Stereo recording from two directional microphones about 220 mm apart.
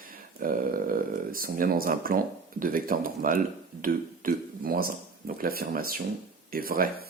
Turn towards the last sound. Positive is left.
turn(degrees=-40)  # may be behind; listen again after turning